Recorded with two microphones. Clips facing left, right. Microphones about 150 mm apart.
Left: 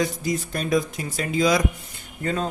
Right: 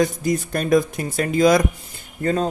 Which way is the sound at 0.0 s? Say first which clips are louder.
Right 5 dB; 50° right (ahead or behind).